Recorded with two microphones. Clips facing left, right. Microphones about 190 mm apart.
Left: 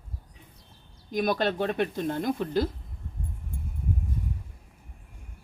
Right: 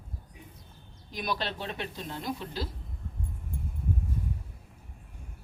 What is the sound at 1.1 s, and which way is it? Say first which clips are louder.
Speech: left 8 dB; 50° left (ahead or behind).